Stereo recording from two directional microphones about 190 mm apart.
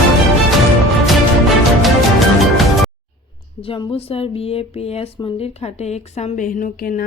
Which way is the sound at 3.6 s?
30° left (ahead or behind).